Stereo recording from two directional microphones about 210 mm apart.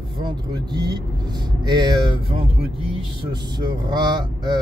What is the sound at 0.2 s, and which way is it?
Speech, 20° right (ahead or behind).